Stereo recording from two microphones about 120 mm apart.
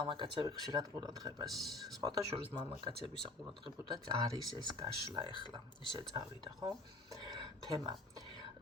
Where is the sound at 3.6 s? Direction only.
40° right (ahead or behind).